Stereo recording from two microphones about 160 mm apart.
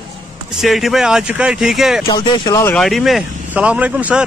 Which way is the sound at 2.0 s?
25° left (ahead or behind).